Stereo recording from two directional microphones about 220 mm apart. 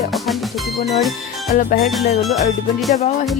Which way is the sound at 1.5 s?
45° left (ahead or behind).